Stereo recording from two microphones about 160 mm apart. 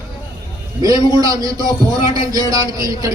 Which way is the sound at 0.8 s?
25° right (ahead or behind).